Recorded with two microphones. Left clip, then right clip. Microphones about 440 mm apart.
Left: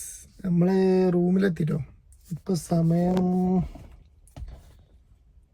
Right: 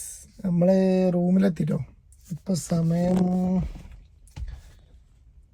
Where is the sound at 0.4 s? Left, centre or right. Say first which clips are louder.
Right 3 dB; centre.